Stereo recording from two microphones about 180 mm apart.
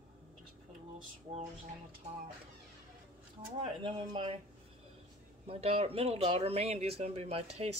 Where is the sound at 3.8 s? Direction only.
30° right (ahead or behind).